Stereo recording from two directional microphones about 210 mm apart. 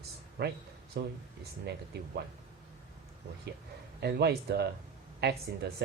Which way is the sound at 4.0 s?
50° right (ahead or behind).